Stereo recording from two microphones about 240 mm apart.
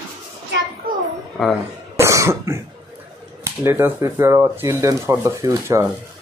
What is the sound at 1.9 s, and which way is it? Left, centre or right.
Cough, centre.